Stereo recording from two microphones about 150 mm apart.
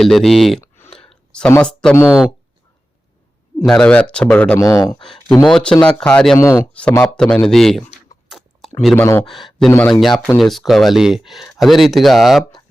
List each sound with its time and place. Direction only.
0.0 s speech: centre (ahead or behind)
0.9 s a sound: 5° left (ahead or behind)
2.0 s speech: 5° right (ahead or behind)
3.7 s speech: 5° left (ahead or behind)
4.6 s speech: 20° left (ahead or behind)
5.3 s speech: 5° left (ahead or behind)
6.4 s speech: 20° left (ahead or behind)
6.7 s speech: 10° left (ahead or behind)
8.3 s a sound: centre (ahead or behind)
9.0 s speech: 15° left (ahead or behind)
9.2 s speech: centre (ahead or behind)
9.6 s speech: 15° left (ahead or behind)
10.2 s speech: centre (ahead or behind)